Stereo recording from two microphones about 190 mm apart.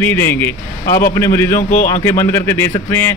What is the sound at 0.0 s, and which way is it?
A man's voice, 10° left (ahead or behind).